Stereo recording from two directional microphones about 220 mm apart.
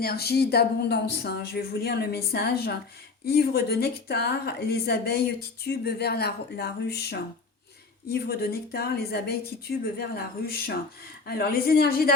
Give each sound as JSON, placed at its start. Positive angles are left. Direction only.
{"t": 0.0, "sound": "a woman's voice", "side_deg": 45}